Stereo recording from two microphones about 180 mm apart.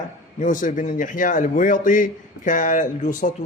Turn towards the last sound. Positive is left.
turn(degrees=45)  # may be behind; listen again after turning